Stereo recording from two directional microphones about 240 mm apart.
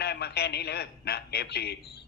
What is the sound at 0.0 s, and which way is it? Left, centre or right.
A man's voice, left.